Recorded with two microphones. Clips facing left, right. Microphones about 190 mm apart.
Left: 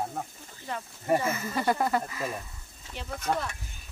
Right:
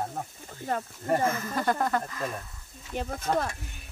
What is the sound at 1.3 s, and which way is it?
Speech, 10° left (ahead or behind).